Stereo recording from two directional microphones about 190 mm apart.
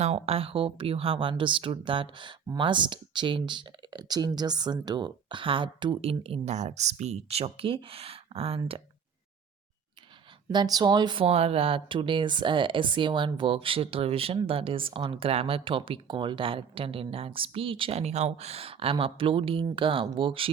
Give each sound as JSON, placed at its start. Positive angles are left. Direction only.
{"t": 0.0, "sound": "speech", "side_deg": -30}
{"t": 10.5, "sound": "speech", "side_deg": -20}